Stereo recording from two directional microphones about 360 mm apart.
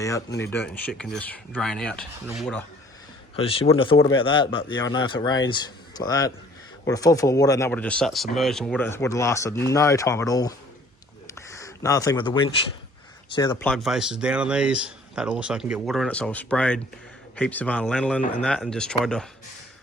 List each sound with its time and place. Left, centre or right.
0.0 s speech: centre
3.3 s speech: centre